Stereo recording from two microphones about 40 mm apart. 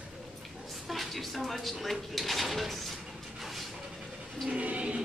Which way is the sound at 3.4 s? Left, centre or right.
Centre.